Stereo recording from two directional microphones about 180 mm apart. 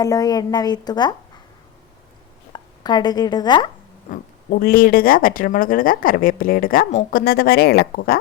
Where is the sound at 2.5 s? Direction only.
25° left (ahead or behind).